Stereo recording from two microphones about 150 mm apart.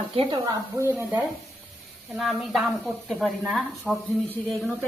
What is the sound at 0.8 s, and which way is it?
Speech, 15° right (ahead or behind).